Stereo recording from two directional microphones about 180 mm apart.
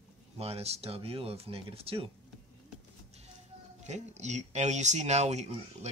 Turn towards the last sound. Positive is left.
turn(degrees=-40)  # may be behind; listen again after turning